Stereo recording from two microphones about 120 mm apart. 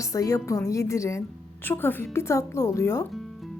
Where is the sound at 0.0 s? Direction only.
30° left (ahead or behind).